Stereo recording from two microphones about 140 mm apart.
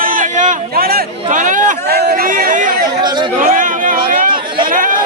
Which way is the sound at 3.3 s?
70° right (ahead or behind).